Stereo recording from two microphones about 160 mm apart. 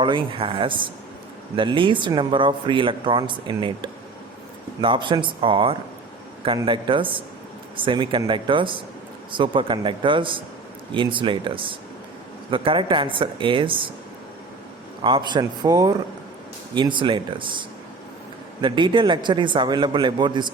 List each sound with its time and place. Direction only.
0.0 s speech: 35° right (ahead or behind)
15.0 s a man's voice: 30° right (ahead or behind)
18.6 s a man's voice: 30° right (ahead or behind)